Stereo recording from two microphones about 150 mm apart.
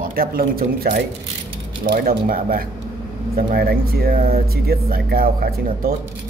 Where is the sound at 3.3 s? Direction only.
85° right.